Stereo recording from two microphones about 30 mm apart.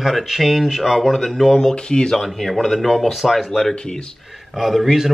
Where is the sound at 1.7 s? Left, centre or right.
Left.